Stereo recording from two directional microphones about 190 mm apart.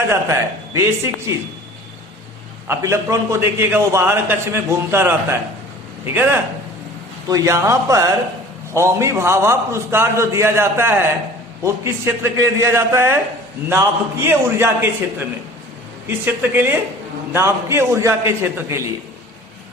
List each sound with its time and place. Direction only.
0.1 s a man's voice: 15° right (ahead or behind)
2.6 s a man's voice: 15° right (ahead or behind)